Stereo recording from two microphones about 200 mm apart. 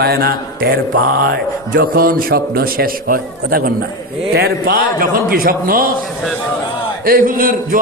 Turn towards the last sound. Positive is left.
turn(degrees=-45)  # may be behind; listen again after turning